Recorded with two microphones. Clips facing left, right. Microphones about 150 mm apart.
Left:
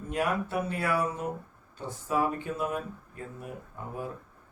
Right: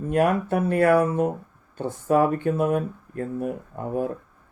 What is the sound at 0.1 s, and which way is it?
Speech, 55° right (ahead or behind).